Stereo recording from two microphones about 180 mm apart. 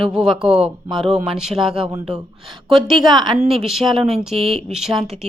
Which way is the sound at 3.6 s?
Centre (ahead or behind).